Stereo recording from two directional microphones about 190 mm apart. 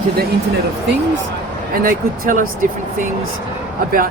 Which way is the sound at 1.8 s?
50° right (ahead or behind).